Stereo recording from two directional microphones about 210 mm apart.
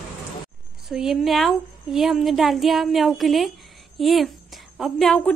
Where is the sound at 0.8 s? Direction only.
Centre (ahead or behind).